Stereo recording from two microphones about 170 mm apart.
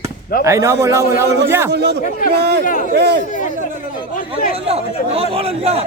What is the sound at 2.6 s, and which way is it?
Speech, 50° left (ahead or behind).